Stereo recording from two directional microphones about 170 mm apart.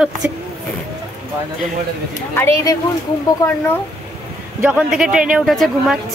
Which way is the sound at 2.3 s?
15° left (ahead or behind).